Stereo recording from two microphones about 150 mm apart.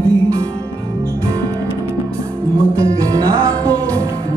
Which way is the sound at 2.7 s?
20° right (ahead or behind).